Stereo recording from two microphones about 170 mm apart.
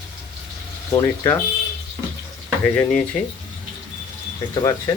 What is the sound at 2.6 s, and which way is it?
Speech, 10° left (ahead or behind).